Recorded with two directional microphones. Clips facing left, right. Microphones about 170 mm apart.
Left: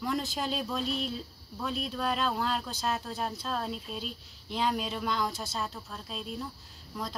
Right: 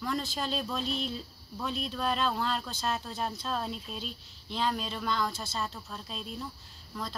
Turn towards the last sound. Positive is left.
turn(degrees=10)  # may be behind; listen again after turning